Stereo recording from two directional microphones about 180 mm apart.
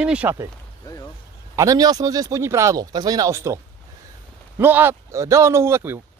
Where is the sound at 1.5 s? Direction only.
20° right (ahead or behind).